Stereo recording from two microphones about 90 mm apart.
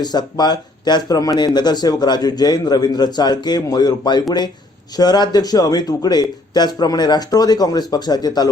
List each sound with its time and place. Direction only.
0.0 s a man's voice: 50° left (ahead or behind)